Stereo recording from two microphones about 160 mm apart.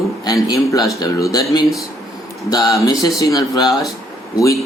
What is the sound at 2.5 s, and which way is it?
Speech, 20° left (ahead or behind).